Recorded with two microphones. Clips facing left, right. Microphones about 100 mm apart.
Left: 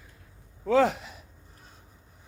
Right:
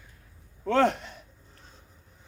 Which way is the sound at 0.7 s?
Centre (ahead or behind).